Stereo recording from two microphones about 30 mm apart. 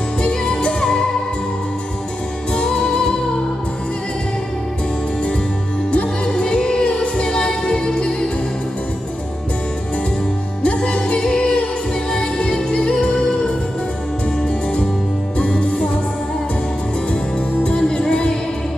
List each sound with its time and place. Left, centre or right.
0.2 s music: left
0.7 s music: left
2.5 s music: left
6.3 s music: left
7.2 s music: left
10.9 s music: left
15.3 s music: left
17.7 s music: left